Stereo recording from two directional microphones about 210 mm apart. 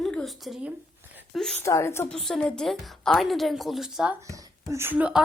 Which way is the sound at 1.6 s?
15° left (ahead or behind).